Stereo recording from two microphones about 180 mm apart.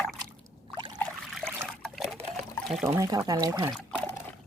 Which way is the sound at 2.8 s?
20° right (ahead or behind).